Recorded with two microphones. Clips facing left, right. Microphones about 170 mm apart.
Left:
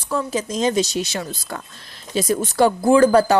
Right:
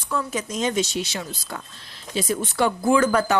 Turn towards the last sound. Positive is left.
turn(degrees=35)  # may be behind; listen again after turning